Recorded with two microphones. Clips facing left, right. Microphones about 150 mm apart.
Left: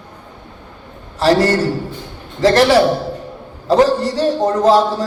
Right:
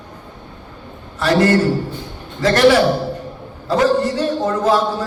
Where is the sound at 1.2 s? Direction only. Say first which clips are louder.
Left 1 dB; 35° left (ahead or behind).